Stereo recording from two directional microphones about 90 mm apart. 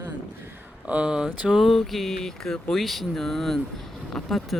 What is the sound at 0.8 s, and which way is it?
Speech, 15° right (ahead or behind).